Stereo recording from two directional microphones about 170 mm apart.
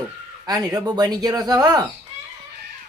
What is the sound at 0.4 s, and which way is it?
Speech, 25° right (ahead or behind).